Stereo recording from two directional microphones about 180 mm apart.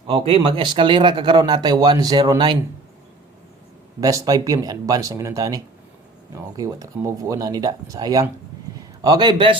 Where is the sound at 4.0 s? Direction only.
20° right (ahead or behind).